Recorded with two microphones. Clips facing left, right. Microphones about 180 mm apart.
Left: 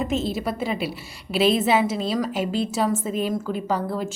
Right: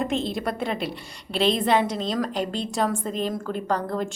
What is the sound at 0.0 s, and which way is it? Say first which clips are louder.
A woman's voice: left 1 dB; 5° left (ahead or behind).